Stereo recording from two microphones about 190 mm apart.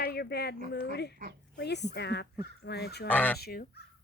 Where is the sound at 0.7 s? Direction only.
60° left (ahead or behind).